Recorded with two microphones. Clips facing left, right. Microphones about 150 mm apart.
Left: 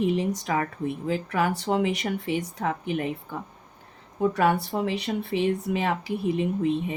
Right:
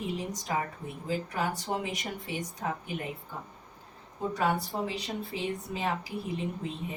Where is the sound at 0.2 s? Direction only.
75° left (ahead or behind).